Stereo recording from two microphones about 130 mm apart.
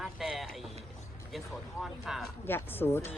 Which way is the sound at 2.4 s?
15° left (ahead or behind).